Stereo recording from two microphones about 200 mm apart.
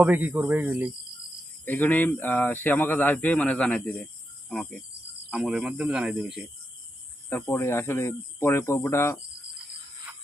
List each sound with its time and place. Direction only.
0.0 s speech: 10° right (ahead or behind)
1.6 s speech: 10° left (ahead or behind)
7.3 s speech: 10° left (ahead or behind)